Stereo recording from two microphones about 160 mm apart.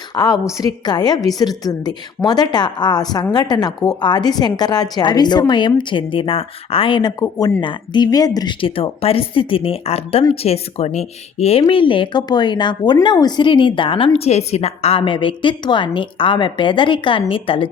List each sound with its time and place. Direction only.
0.1 s a woman's voice: 25° left (ahead or behind)